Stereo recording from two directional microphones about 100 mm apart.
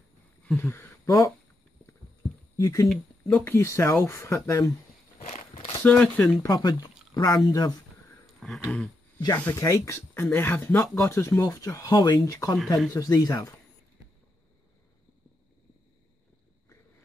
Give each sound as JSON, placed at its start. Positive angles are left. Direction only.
{"t": 0.6, "sound": "speech", "side_deg": 20}
{"t": 1.0, "sound": "speech", "side_deg": 35}
{"t": 2.5, "sound": "speech", "side_deg": 35}
{"t": 2.9, "sound": "speech", "side_deg": 5}
{"t": 3.4, "sound": "speech", "side_deg": 25}
{"t": 5.2, "sound": "walk", "side_deg": 75}
{"t": 5.9, "sound": "speech", "side_deg": 15}
{"t": 6.4, "sound": "speech", "side_deg": 40}
{"t": 8.4, "sound": "a sound", "side_deg": 5}
{"t": 9.6, "sound": "speech", "side_deg": 30}
{"t": 12.5, "sound": "speech", "side_deg": 0}
{"t": 12.9, "sound": "speech", "side_deg": 35}